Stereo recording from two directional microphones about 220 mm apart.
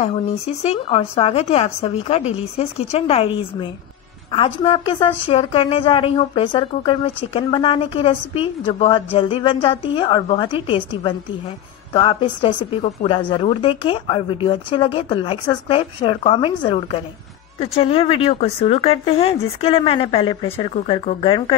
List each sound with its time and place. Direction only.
0.0 s a woman's voice: 30° left (ahead or behind)